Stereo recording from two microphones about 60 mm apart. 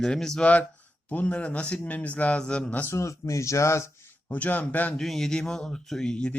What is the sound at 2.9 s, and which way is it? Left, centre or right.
Speech, left.